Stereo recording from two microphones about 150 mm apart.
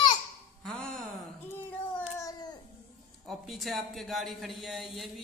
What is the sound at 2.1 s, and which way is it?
Babbling, 20° left (ahead or behind).